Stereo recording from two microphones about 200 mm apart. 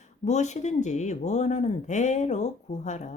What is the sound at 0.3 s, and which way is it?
Speech, 35° left (ahead or behind).